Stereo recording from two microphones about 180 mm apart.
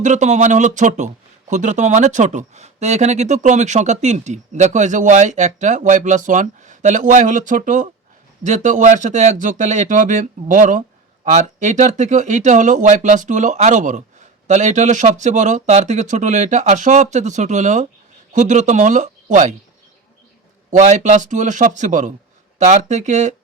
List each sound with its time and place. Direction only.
0.0 s speech: 40° right (ahead or behind)
20.7 s speech: 40° right (ahead or behind)